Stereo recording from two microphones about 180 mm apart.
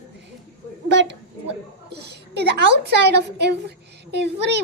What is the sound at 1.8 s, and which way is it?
A woman's voice, 65° right (ahead or behind).